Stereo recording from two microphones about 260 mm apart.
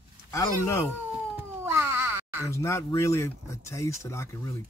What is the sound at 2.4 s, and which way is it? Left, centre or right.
Speech, centre.